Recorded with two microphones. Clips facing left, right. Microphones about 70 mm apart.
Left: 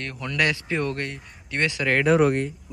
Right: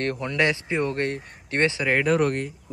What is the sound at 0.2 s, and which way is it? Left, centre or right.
Speech, right.